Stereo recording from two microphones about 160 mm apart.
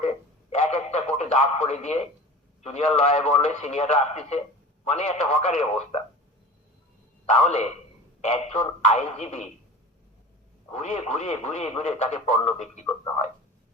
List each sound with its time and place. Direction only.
0.5 s radio: 45° left (ahead or behind)
2.6 s speech: 45° left (ahead or behind)
7.3 s speech: 45° left (ahead or behind)
10.7 s speech: 45° left (ahead or behind)